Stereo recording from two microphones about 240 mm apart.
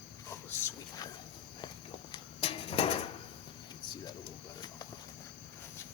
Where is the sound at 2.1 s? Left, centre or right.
Left.